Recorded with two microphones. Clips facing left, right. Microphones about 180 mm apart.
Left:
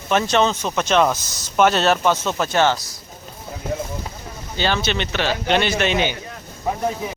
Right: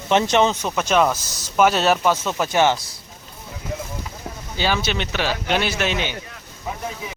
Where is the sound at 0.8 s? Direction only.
5° right (ahead or behind).